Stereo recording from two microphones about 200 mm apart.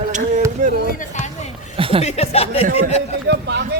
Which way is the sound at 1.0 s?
35° left (ahead or behind).